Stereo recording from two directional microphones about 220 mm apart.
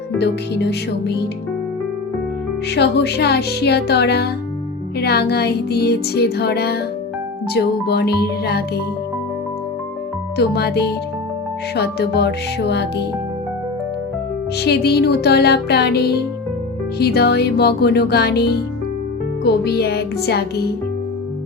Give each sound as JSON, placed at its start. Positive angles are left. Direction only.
{"t": 0.2, "sound": "music", "side_deg": 50}
{"t": 2.6, "sound": "music", "side_deg": 50}
{"t": 10.3, "sound": "music", "side_deg": 45}
{"t": 14.6, "sound": "music", "side_deg": 45}